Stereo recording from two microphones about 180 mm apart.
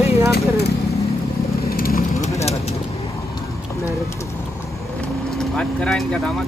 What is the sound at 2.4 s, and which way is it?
Bird, 35° left (ahead or behind).